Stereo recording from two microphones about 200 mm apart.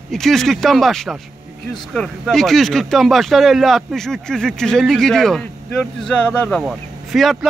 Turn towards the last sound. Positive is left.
turn(degrees=0)  # may be behind; listen again after turning